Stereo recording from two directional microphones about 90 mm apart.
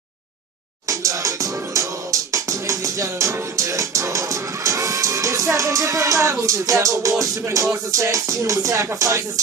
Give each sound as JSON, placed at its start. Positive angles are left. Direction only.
{"t": 0.8, "sound": "music", "side_deg": -35}